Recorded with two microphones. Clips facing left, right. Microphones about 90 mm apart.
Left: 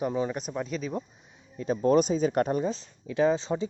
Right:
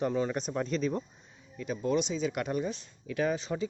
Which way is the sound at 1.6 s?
40° left (ahead or behind).